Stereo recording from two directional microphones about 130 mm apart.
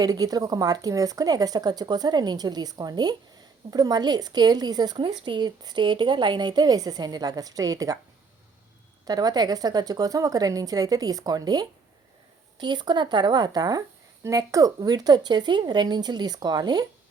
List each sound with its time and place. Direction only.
0.0 s speech: 30° right (ahead or behind)
9.0 s a woman's voice: 30° right (ahead or behind)